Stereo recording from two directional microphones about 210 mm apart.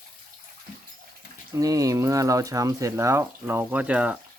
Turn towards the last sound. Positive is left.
turn(degrees=-5)  # may be behind; listen again after turning